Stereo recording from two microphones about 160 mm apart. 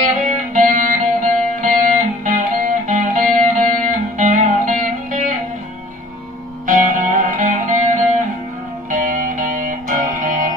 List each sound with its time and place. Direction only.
0.6 s music: 55° right (ahead or behind)
6.6 s music: 55° right (ahead or behind)